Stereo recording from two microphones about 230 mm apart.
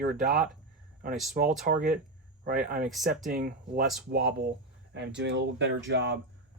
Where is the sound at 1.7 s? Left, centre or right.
Right.